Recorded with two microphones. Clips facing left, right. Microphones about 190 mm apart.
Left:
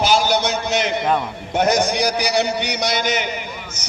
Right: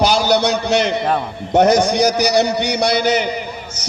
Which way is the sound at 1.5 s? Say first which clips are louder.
Right 5 dB; 40° right (ahead or behind).